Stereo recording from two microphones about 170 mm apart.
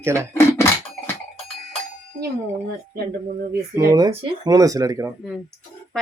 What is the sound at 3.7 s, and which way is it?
Speech, 20° right (ahead or behind).